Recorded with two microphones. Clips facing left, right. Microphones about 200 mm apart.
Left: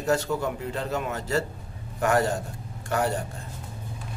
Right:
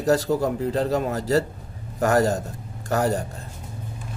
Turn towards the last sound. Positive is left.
turn(degrees=-40)  # may be behind; listen again after turning